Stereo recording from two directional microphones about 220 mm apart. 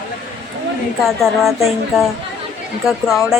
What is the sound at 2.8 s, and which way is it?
Speech, centre (ahead or behind).